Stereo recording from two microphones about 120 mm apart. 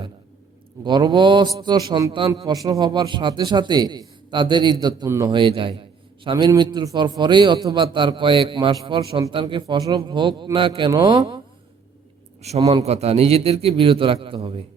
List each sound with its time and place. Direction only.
0.9 s a man's voice: 40° right (ahead or behind)
2.5 s a man's voice: 30° right (ahead or behind)
5.0 s a man's voice: 25° right (ahead or behind)
5.3 s a man's voice: 45° right (ahead or behind)
12.4 s a man's voice: 60° right (ahead or behind)